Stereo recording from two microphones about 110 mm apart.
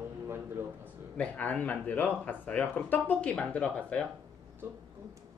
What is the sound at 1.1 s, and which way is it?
Speech, 10° left (ahead or behind).